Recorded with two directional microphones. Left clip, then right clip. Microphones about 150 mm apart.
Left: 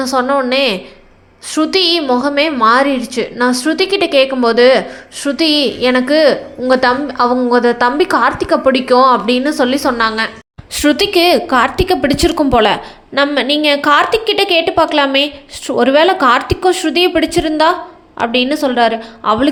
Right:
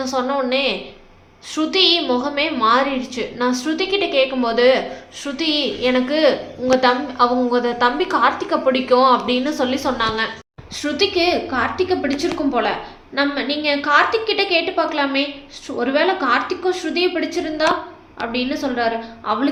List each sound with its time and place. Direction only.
0.0 s a woman's voice: 45° left (ahead or behind)
10.8 s a woman's voice: 80° left; by 19.5 s 65° left (ahead or behind)